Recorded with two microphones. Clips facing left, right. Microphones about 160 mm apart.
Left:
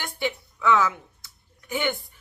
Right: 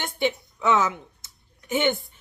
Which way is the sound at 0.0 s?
20° right (ahead or behind).